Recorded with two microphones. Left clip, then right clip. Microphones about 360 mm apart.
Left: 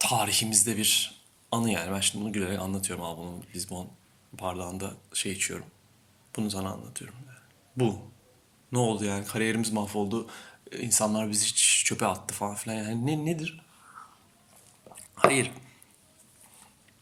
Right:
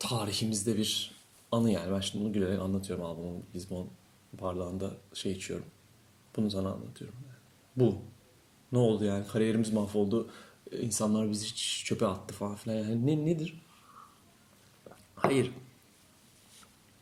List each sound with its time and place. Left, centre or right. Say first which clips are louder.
0.0 s speech: left 8 dB; centre
8.7 s speech: even; centre
15.3 s speech: left 3 dB; centre